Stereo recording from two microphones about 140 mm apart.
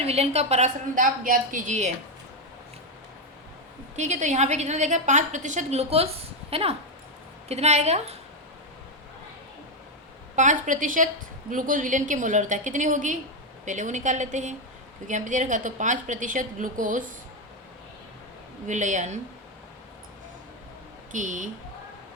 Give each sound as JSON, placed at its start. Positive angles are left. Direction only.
{"t": 0.0, "sound": "a woman's voice", "side_deg": -45}
{"t": 0.9, "sound": "a woman's voice", "side_deg": -75}
{"t": 3.9, "sound": "a woman's voice", "side_deg": -55}
{"t": 10.3, "sound": "a woman's voice", "side_deg": -60}
{"t": 18.7, "sound": "a woman's voice", "side_deg": -60}
{"t": 21.1, "sound": "a woman's voice", "side_deg": -65}